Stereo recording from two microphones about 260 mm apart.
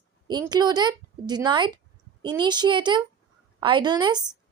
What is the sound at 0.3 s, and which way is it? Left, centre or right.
Speech, centre.